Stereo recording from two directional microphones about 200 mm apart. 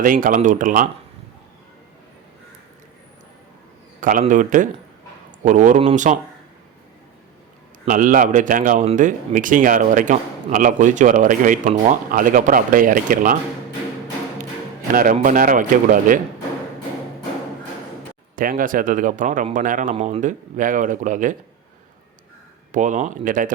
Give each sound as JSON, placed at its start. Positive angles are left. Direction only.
{"t": 0.0, "sound": "speech", "side_deg": -45}
{"t": 4.0, "sound": "a man's voice", "side_deg": -40}
{"t": 7.9, "sound": "a man's voice", "side_deg": -40}
{"t": 14.9, "sound": "a man's voice", "side_deg": -40}
{"t": 18.3, "sound": "a man's voice", "side_deg": -45}
{"t": 22.7, "sound": "a man's voice", "side_deg": -40}